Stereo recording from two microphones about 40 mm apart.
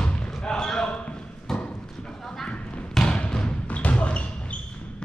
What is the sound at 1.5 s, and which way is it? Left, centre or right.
Clip-clop, centre.